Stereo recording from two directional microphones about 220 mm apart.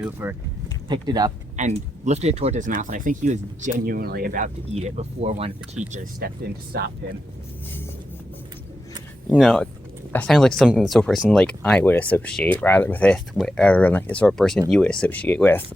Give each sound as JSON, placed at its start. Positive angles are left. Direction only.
{"t": 0.0, "sound": "speech", "side_deg": -10}
{"t": 1.5, "sound": "speech", "side_deg": -30}
{"t": 9.3, "sound": "speech", "side_deg": 5}